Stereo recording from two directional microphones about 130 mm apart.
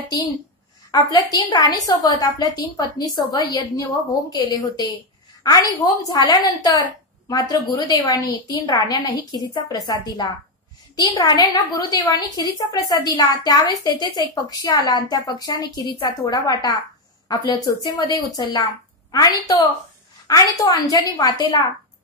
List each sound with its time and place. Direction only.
0.9 s a woman's voice: 30° left (ahead or behind)